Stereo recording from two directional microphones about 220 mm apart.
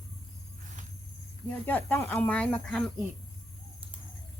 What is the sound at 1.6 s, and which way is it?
Speech, 10° left (ahead or behind).